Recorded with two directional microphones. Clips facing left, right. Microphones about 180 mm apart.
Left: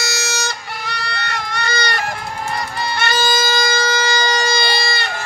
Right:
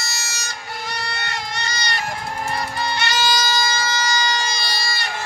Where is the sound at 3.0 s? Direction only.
50° left (ahead or behind).